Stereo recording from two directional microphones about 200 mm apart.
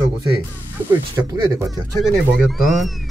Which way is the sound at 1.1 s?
20° right (ahead or behind).